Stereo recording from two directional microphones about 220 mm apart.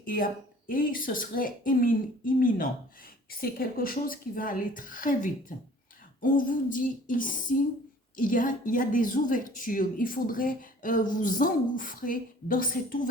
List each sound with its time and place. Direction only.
0.0 s a woman's voice: 40° left (ahead or behind)